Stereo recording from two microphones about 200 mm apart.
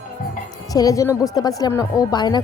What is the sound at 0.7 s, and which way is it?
A woman's voice, 20° left (ahead or behind).